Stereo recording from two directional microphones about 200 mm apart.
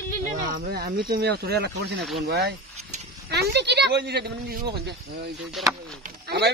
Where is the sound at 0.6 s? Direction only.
55° right (ahead or behind).